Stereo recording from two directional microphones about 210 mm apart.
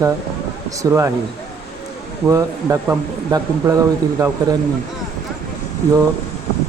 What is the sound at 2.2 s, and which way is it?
Speech, 15° right (ahead or behind).